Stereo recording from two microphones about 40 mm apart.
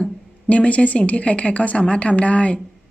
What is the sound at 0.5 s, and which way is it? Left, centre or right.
Speech, left.